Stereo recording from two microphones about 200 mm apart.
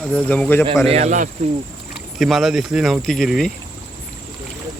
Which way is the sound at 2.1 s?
Centre (ahead or behind).